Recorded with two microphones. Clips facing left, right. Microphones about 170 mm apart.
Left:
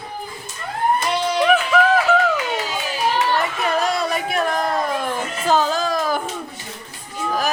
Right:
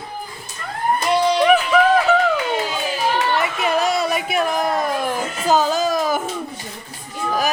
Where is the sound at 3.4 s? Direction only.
10° right (ahead or behind).